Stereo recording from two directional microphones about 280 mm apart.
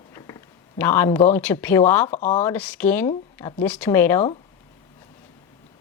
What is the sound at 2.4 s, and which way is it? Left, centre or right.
Speech, centre.